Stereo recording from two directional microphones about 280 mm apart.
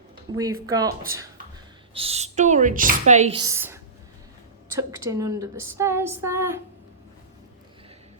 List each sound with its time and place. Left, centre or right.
0.3 s a woman's voice: centre
4.8 s a woman's voice: centre